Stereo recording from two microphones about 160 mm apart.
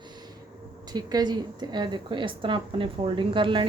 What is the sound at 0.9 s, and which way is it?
A woman's voice, 25° right (ahead or behind).